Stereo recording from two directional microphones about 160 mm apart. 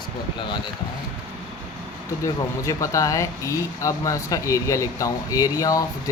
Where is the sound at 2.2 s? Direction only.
20° left (ahead or behind).